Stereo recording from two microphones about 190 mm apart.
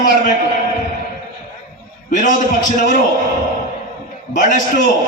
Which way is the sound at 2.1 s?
40° left (ahead or behind).